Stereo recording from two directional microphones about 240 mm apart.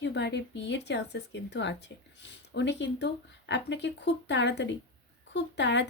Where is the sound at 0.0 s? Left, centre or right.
Left.